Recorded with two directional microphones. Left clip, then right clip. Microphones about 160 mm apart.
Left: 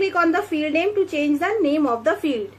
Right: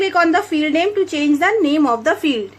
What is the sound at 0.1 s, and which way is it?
A woman's voice, 50° right (ahead or behind).